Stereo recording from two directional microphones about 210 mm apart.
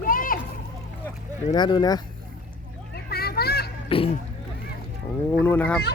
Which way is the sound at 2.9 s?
45° left (ahead or behind).